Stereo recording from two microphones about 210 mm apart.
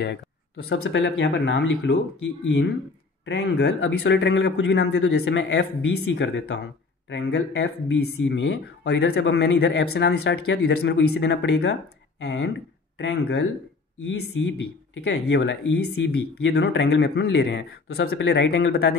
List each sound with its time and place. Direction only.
0.7 s speech: 70° left (ahead or behind); by 18.9 s 50° left (ahead or behind)